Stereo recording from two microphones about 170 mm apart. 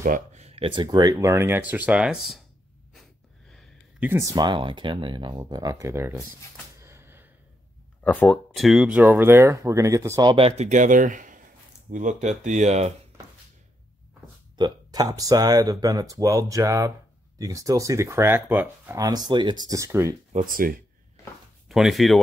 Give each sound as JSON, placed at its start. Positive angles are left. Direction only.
{"t": 0.0, "sound": "speech", "side_deg": -45}
{"t": 2.9, "sound": "gasp", "side_deg": 0}
{"t": 4.0, "sound": "speech", "side_deg": -15}
{"t": 6.8, "sound": "a sound", "side_deg": -15}
{"t": 8.0, "sound": "speech", "side_deg": 10}
{"t": 10.3, "sound": "speech", "side_deg": -35}
{"t": 14.6, "sound": "speech", "side_deg": -20}
{"t": 20.3, "sound": "speech", "side_deg": -55}
{"t": 21.6, "sound": "speech", "side_deg": 0}